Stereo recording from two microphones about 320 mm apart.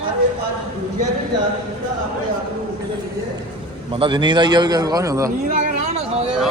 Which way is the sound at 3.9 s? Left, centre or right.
Centre.